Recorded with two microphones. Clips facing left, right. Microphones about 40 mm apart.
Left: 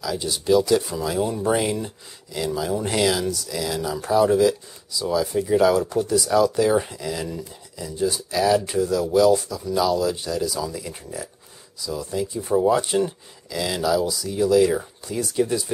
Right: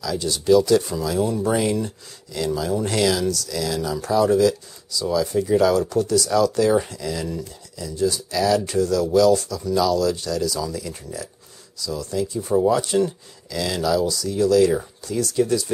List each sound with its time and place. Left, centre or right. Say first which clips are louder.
0.0 s speech: right 2 dB; centre
7.7 s speech: right 2 dB; left